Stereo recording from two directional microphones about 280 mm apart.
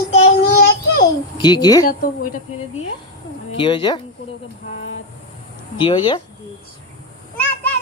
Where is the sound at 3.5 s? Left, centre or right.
Centre.